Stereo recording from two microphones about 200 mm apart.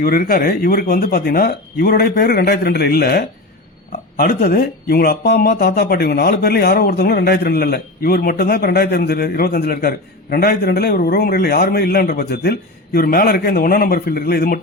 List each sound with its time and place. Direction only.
0.0 s speech: 50° left (ahead or behind)